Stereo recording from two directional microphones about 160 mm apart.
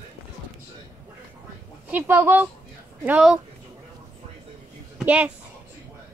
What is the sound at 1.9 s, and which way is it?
Speech, 10° right (ahead or behind).